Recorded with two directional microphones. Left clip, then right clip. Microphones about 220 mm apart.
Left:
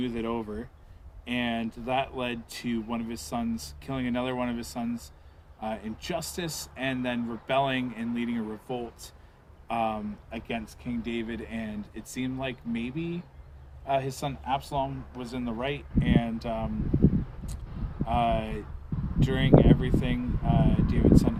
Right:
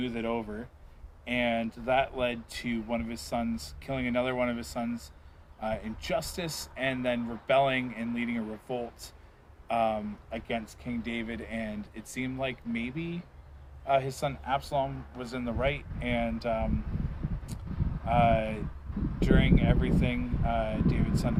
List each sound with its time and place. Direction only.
0.0 s speech: 10° left (ahead or behind)
18.1 s speech: 10° left (ahead or behind)